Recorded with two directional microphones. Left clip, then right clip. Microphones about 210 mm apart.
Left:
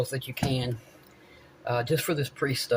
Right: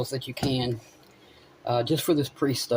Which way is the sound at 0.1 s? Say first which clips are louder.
Right 2 dB; 45° right (ahead or behind).